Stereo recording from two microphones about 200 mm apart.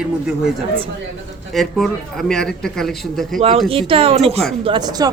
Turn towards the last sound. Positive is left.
turn(degrees=-20)  # may be behind; listen again after turning